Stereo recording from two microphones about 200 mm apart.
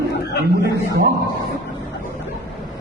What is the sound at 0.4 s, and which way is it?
Speech, 55° right (ahead or behind).